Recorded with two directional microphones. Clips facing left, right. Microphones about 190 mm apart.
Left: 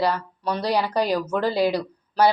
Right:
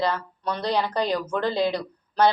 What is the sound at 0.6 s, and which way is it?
A woman's voice, 10° left (ahead or behind).